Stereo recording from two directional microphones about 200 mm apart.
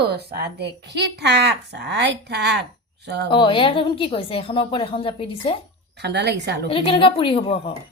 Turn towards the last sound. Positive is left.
turn(degrees=30)  # may be behind; listen again after turning